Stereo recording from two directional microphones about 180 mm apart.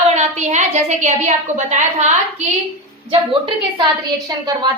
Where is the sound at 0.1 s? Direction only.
40° right (ahead or behind).